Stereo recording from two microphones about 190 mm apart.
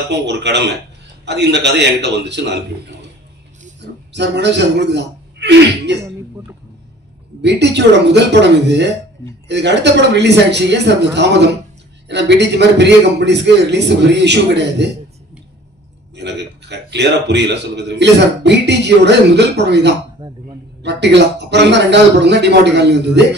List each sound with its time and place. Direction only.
0.1 s a man's voice: 65° right (ahead or behind)
3.8 s a man's voice: 65° right (ahead or behind)
7.4 s a man's voice: 65° right (ahead or behind)
16.2 s a man's voice: 65° right (ahead or behind)